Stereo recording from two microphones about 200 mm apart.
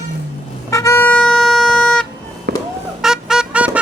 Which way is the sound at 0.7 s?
15° left (ahead or behind).